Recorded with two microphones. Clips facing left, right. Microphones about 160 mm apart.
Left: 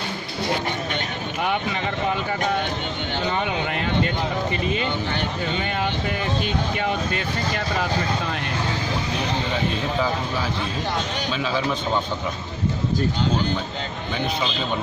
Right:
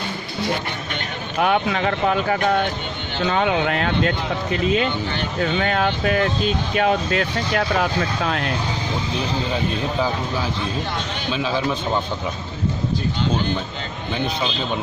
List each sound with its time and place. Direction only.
1.4 s speech: 90° right